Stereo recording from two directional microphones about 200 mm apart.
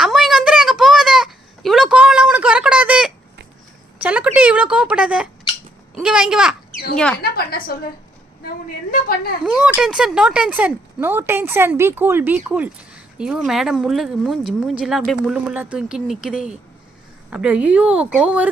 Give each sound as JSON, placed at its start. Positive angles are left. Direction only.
{"t": 0.0, "sound": "a sound", "side_deg": 0}
{"t": 5.9, "sound": "speech", "side_deg": -5}
{"t": 7.2, "sound": "a woman's voice", "side_deg": 50}
{"t": 8.9, "sound": "a woman's voice", "side_deg": 45}
{"t": 9.5, "sound": "speech", "side_deg": -5}